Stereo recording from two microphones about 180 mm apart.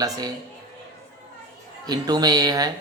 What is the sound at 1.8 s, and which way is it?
Speech, 20° right (ahead or behind).